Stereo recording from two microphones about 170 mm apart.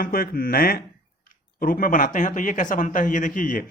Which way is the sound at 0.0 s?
60° left (ahead or behind).